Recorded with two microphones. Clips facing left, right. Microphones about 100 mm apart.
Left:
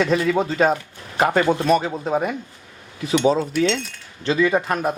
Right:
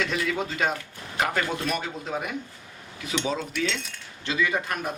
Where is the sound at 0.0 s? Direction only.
35° left (ahead or behind).